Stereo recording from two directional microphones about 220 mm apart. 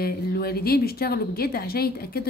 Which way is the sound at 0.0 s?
45° left (ahead or behind).